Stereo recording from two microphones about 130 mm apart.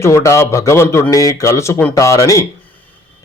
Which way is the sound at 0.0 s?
25° left (ahead or behind).